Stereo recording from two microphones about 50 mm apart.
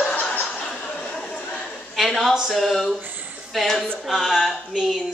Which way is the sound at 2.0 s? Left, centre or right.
Centre.